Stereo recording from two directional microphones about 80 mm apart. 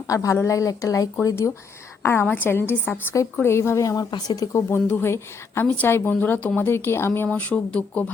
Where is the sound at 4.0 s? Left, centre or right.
Left.